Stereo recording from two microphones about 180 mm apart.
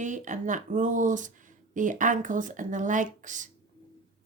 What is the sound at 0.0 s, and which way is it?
Speech, 45° right (ahead or behind).